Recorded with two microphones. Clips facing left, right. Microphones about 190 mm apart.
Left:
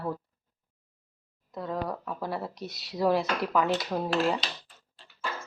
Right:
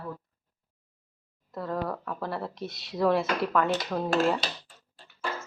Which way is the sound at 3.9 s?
10° left (ahead or behind).